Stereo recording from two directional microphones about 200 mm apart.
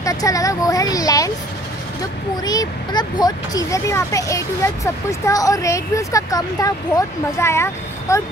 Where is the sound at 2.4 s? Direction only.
20° left (ahead or behind).